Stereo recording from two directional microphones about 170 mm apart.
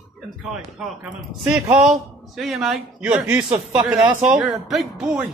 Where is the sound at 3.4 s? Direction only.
35° right (ahead or behind).